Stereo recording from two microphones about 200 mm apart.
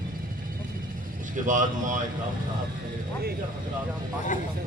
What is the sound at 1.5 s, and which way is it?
Speech, 40° right (ahead or behind).